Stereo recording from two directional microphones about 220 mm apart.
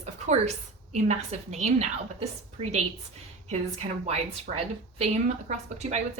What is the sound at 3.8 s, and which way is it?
A woman's voice, 35° right (ahead or behind).